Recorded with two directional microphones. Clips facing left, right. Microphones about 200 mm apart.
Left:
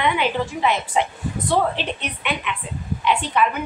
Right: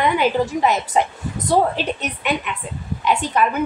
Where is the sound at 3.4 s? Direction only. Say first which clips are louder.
Right 1 dB; 45° right (ahead or behind).